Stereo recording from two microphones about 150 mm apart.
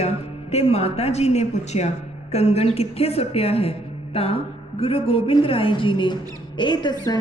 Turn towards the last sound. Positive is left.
turn(degrees=30)  # may be behind; listen again after turning